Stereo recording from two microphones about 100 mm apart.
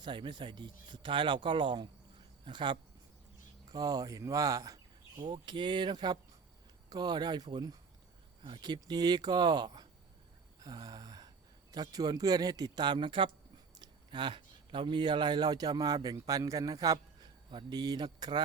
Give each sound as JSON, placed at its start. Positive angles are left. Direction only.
{"t": 0.0, "sound": "speech", "side_deg": -50}
{"t": 3.7, "sound": "speech", "side_deg": -40}
{"t": 8.4, "sound": "speech", "side_deg": -55}
{"t": 10.6, "sound": "a sound", "side_deg": -40}
{"t": 11.7, "sound": "speech", "side_deg": -40}
{"t": 17.5, "sound": "speech", "side_deg": -50}